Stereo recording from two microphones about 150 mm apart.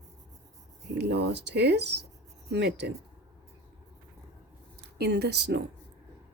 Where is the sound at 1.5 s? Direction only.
90° right.